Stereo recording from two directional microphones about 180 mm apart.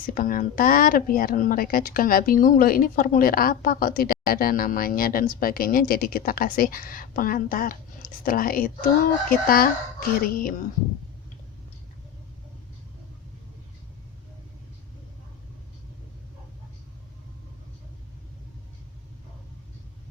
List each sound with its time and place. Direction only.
0.1 s a woman's voice: 50° left (ahead or behind)